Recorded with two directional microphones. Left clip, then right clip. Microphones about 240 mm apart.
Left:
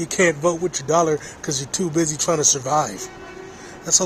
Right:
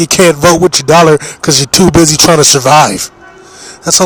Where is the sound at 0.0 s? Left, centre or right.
Right.